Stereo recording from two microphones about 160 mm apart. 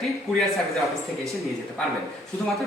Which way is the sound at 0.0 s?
Centre (ahead or behind).